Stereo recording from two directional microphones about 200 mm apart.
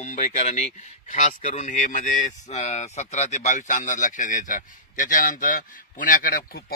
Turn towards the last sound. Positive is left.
turn(degrees=45)  # may be behind; listen again after turning